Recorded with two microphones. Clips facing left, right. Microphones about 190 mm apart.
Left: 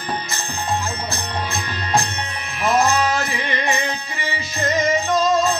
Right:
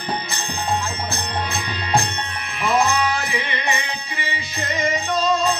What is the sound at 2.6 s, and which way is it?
Music, 45° left (ahead or behind).